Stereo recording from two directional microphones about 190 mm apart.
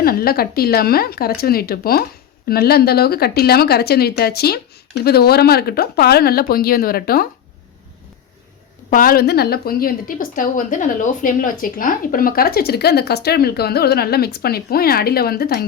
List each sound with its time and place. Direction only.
0.0 s a woman's voice: 50° left (ahead or behind)
8.9 s a woman's voice: 50° left (ahead or behind)